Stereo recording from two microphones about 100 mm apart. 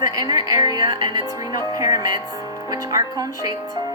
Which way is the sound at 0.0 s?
35° right (ahead or behind).